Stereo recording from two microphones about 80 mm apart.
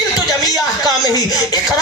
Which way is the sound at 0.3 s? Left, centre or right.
Left.